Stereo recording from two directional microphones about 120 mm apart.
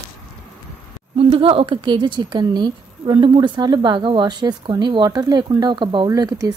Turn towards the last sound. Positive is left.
turn(degrees=-30)  # may be behind; listen again after turning